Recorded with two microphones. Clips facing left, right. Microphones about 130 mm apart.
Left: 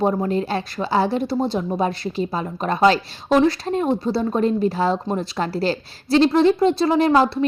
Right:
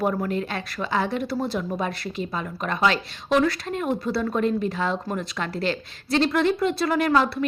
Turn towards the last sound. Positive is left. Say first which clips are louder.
# left 5 dB
turn(degrees=30)  # may be behind; listen again after turning